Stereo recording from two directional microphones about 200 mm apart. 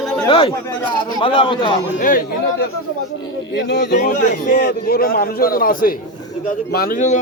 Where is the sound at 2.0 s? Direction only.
45° left (ahead or behind).